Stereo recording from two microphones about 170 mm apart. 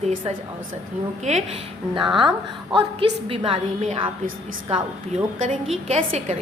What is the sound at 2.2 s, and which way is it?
A woman's voice, 30° right (ahead or behind).